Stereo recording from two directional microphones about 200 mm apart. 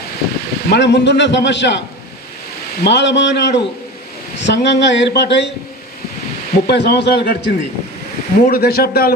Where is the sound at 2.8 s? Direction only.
60° left (ahead or behind).